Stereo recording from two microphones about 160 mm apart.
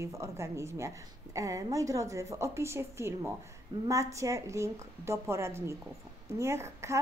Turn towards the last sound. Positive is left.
turn(degrees=-15)  # may be behind; listen again after turning